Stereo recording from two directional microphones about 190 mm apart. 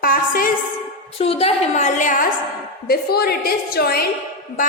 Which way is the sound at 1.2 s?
30° left (ahead or behind).